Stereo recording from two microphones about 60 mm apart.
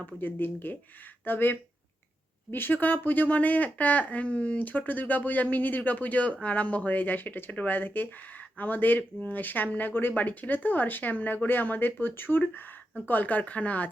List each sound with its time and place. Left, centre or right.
0.0 s speech: left